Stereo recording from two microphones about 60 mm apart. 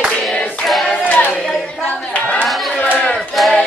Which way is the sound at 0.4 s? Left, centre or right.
Left.